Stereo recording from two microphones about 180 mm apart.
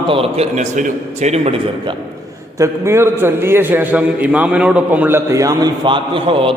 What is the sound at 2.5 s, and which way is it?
A man's voice, 15° right (ahead or behind).